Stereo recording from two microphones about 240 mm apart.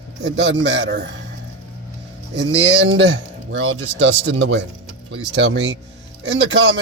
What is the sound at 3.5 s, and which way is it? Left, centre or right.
Speech, right.